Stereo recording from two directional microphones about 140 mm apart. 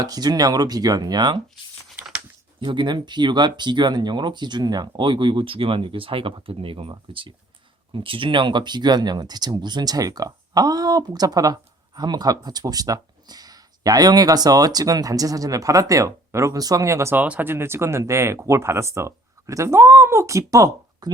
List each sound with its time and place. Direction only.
0.0 s speech: 30° right (ahead or behind)
2.6 s speech: 35° right (ahead or behind)